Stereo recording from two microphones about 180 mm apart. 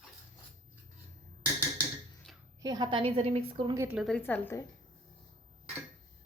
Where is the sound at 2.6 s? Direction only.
20° right (ahead or behind).